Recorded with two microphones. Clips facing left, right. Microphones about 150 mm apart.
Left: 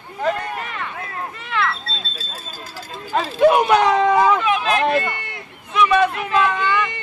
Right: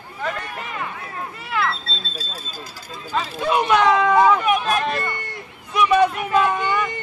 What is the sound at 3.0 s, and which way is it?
Speech, 50° left (ahead or behind).